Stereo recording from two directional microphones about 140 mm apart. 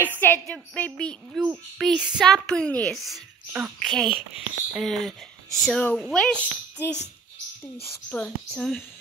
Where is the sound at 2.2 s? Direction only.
5° left (ahead or behind).